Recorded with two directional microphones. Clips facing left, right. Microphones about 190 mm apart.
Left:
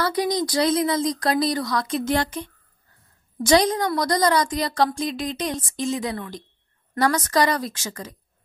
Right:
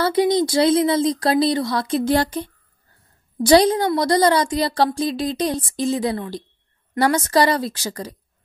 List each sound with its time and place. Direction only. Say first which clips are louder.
0.0 s a woman's voice: right 5 dB; 25° right (ahead or behind)